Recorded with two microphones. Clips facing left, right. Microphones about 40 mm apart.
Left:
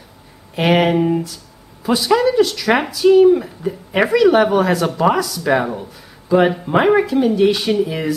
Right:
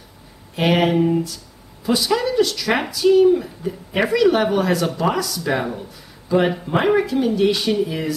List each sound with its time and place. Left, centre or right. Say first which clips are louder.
0.6 s speech: left 2 dB; centre